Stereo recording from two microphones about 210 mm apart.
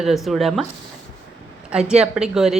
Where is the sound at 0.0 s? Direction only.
Centre (ahead or behind).